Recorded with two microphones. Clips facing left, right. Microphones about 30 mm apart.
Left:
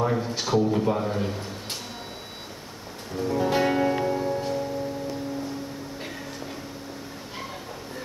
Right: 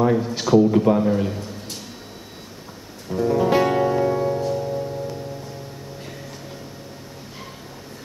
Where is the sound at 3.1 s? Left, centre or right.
Centre.